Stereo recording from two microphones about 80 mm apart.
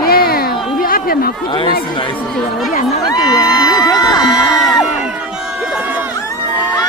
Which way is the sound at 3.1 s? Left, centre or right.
Left.